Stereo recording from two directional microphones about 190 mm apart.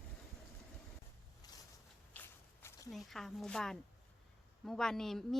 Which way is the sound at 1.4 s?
20° left (ahead or behind).